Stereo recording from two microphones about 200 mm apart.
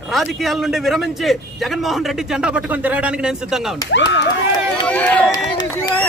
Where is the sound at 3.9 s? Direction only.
60° left (ahead or behind).